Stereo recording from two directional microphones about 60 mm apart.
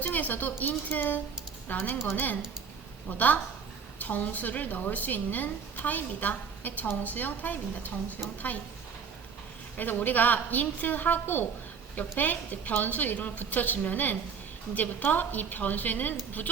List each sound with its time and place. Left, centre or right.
0.0 s a woman's voice: left
9.7 s a woman's voice: left